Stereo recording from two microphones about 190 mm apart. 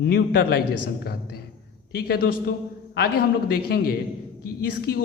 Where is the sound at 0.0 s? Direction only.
60° left (ahead or behind).